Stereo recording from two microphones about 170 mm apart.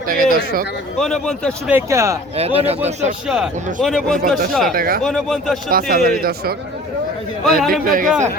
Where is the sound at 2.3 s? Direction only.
35° right (ahead or behind).